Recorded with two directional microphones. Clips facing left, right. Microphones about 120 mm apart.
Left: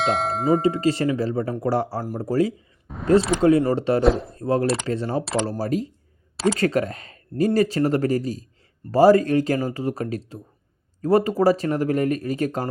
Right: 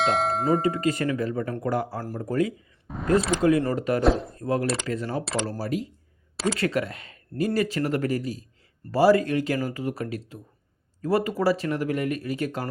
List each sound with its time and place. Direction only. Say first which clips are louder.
0.0 s speech: left 1 dB; centre (ahead or behind)
0.6 s speech: left 4 dB; 30° left (ahead or behind)
2.8 s a sound: right 1 dB; centre (ahead or behind)
3.7 s speech: left 4 dB; 30° left (ahead or behind)
4.0 s speech: even; centre (ahead or behind)
4.4 s speech: left 4 dB; 30° left (ahead or behind)